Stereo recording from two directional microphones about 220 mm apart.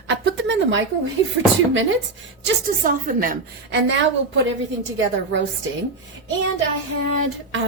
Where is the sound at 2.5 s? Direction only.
40° right (ahead or behind).